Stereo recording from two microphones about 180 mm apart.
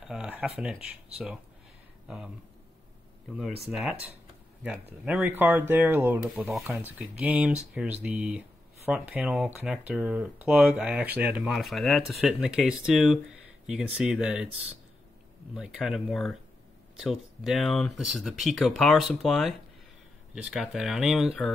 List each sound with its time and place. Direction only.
0.0 s speech: 5° right (ahead or behind)
3.7 s speech: centre (ahead or behind)
15.5 s speech: 5° right (ahead or behind)